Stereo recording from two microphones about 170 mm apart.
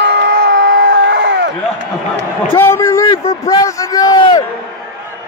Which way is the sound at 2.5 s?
15° left (ahead or behind).